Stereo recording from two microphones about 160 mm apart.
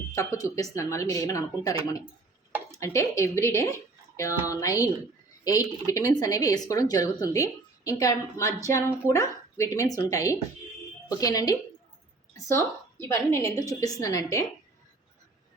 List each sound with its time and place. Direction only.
0.1 s speech: 20° left (ahead or behind)
13.0 s speech: 15° left (ahead or behind)